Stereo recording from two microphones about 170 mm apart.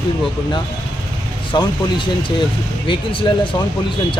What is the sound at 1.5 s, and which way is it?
Speech, 25° left (ahead or behind).